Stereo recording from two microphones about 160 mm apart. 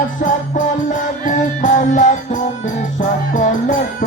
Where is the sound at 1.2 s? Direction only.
55° left (ahead or behind).